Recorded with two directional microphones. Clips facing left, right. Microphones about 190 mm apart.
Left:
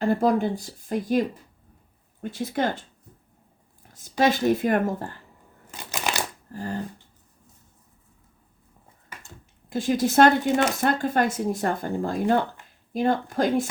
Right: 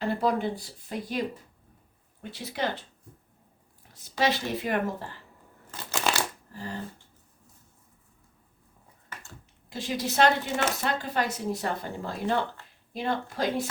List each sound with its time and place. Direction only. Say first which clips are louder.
0.0 s speech: left 5 dB; 45° left (ahead or behind)
2.2 s speech: left 6 dB; 45° left (ahead or behind)
4.2 s speech: left 7 dB; 50° left (ahead or behind)
5.7 s shuffling cards: even; 15° left (ahead or behind)
6.5 s speech: left 6 dB; 50° left (ahead or behind)
9.6 s speech: left 8 dB; 50° left (ahead or behind)